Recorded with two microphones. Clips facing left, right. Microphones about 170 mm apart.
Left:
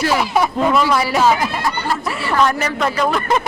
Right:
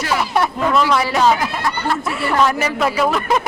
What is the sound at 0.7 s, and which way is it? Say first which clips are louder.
Speech: even; 5° left (ahead or behind).